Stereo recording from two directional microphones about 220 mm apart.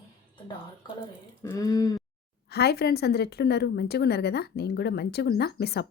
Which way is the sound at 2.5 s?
45° left (ahead or behind).